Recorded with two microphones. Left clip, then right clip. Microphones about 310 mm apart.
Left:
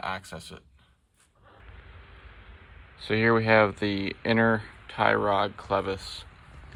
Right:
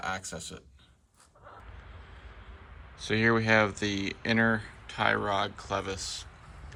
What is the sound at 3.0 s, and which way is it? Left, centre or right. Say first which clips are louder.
Speech: left 3 dB; centre.